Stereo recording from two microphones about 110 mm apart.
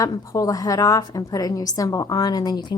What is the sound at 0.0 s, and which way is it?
A woman's voice, 35° left (ahead or behind).